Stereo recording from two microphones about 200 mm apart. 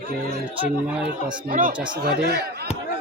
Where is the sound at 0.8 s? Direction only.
5° right (ahead or behind).